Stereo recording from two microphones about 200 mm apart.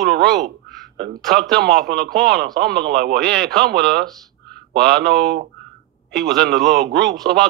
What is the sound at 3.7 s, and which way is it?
A man's voice, 55° right (ahead or behind).